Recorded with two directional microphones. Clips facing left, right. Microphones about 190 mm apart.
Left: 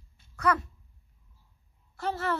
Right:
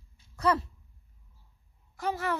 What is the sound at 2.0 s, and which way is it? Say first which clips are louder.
Speech: even; 10° right (ahead or behind).